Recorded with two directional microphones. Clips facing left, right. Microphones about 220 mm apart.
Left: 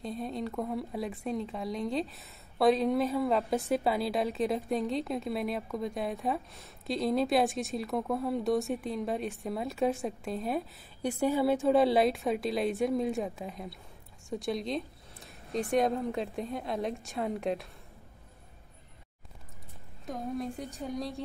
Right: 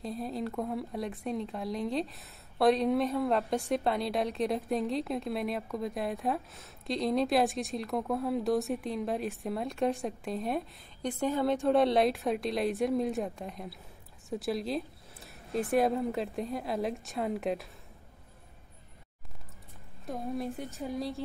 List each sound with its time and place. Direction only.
0.0 s speech: centre (ahead or behind)
20.1 s speech: centre (ahead or behind)